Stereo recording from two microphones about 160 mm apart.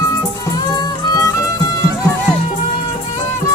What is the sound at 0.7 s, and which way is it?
Music, 25° left (ahead or behind).